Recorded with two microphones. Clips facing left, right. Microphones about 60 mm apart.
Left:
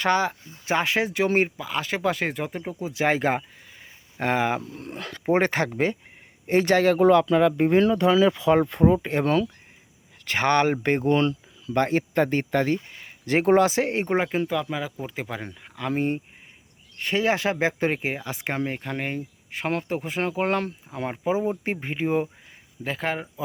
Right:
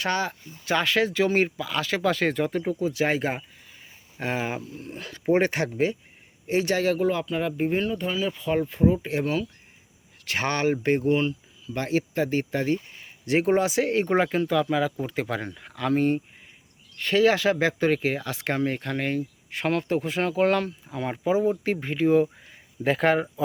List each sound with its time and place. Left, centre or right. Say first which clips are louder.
0.0 s speech: left 4 dB; left
5.2 s speech: even; left
7.0 s speech: left 8 dB; left
10.3 s speech: left 4 dB; left
11.1 s speech: left 2 dB; left
11.6 s speech: left 4 dB; left
14.1 s speech: right 1 dB; centre
15.9 s speech: right 3 dB; centre
22.8 s speech: right 7 dB; centre